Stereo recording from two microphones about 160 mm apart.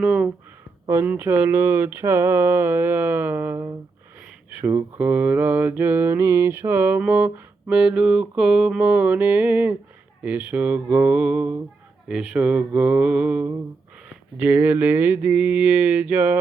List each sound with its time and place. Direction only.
0.0 s mantra: 5° right (ahead or behind)